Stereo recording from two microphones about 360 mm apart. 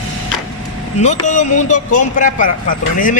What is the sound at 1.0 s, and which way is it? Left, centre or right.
A man's voice, centre.